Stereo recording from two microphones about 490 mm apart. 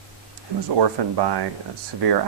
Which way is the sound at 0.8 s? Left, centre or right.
Right.